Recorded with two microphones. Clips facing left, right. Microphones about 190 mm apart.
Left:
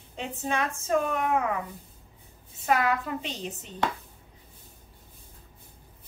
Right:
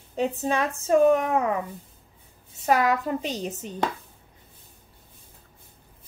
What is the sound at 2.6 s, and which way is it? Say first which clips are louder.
A woman's voice: right 3 dB; 40° right (ahead or behind).